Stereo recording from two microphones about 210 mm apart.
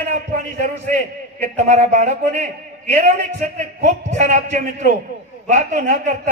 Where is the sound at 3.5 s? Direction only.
35° right (ahead or behind).